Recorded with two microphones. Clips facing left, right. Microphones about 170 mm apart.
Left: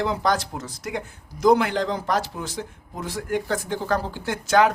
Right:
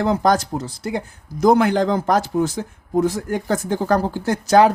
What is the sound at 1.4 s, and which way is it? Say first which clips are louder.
Speech: right 4 dB; 45° right (ahead or behind).